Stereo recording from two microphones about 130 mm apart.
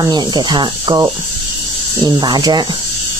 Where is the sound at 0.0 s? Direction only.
35° right (ahead or behind).